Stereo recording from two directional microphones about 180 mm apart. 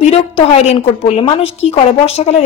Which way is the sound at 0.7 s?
35° left (ahead or behind).